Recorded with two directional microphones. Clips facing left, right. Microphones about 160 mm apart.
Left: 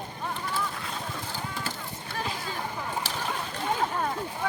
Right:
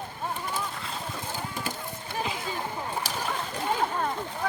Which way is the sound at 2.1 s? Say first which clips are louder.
Right 2 dB; 20° right (ahead or behind).